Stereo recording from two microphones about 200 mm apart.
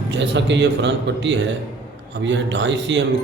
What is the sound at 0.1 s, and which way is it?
Speech, 65° right (ahead or behind).